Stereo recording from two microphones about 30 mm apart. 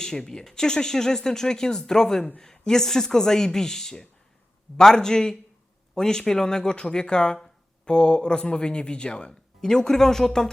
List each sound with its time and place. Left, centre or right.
0.0 s speech: centre